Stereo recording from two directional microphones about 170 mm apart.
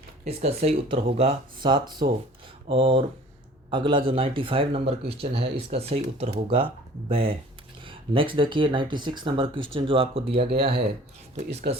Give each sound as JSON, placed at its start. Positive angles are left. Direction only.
{"t": 0.3, "sound": "speech", "side_deg": -35}